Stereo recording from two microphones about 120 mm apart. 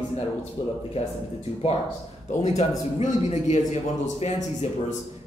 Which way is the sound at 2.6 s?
65° left (ahead or behind).